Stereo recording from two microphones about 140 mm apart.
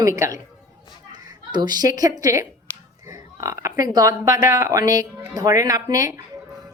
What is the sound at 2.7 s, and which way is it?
Finger snapping, 10° left (ahead or behind).